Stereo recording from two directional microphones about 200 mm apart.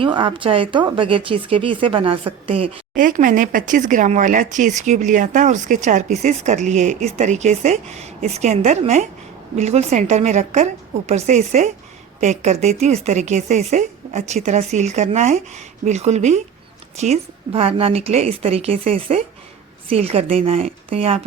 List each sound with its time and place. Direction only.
0.0 s a woman's voice: 25° right (ahead or behind)
2.9 s a woman's voice: 40° right (ahead or behind)